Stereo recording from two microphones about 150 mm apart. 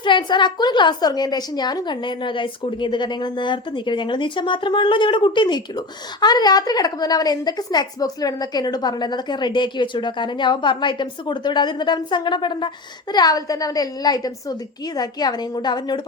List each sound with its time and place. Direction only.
0.0 s a woman's voice: 30° left (ahead or behind)